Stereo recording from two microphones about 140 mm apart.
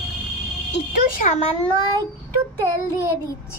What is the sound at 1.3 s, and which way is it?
Speech, 55° left (ahead or behind).